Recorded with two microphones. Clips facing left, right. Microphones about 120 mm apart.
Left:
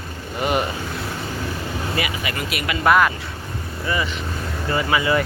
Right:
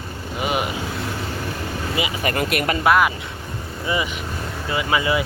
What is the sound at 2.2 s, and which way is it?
Speech, 50° right (ahead or behind).